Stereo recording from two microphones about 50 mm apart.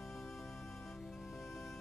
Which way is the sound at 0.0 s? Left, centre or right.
Centre.